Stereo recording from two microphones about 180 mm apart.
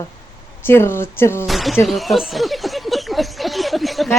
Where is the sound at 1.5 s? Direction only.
Centre (ahead or behind).